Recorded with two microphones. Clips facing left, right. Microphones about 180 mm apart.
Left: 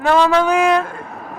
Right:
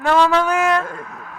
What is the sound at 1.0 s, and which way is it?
Speech, 40° left (ahead or behind).